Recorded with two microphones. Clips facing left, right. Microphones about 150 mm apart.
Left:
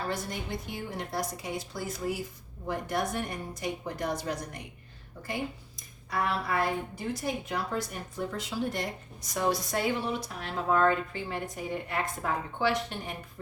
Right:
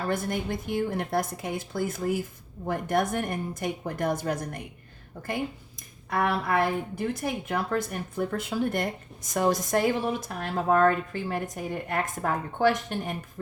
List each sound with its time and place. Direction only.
0.1 s a woman's voice: 55° right (ahead or behind)
6.1 s a woman's voice: 55° right (ahead or behind)